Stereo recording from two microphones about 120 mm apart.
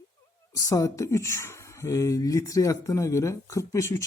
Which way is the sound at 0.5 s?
30° left (ahead or behind).